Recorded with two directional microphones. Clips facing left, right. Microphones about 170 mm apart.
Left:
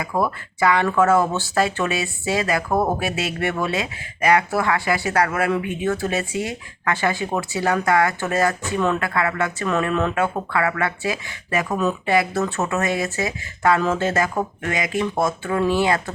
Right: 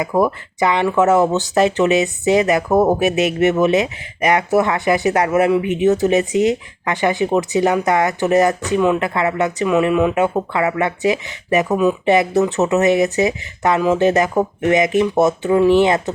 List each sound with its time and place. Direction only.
0.0 s speech: 20° right (ahead or behind)